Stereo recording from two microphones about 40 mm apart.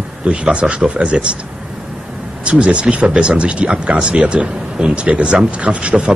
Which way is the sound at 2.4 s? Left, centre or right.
Right.